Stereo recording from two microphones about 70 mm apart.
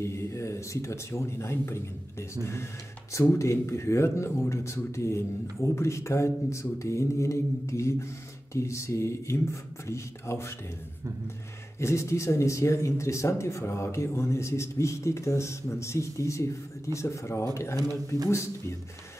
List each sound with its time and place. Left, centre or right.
0.0 s speech: left
11.8 s speech: left
17.7 s speech: right